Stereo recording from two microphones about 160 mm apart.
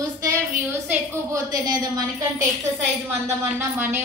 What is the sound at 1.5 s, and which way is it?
Speech, 25° right (ahead or behind).